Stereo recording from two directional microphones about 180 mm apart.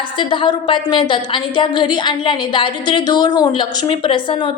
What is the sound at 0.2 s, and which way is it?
A woman's voice, 25° left (ahead or behind).